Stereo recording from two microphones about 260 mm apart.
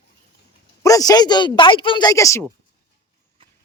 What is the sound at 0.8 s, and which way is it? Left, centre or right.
Speech, centre.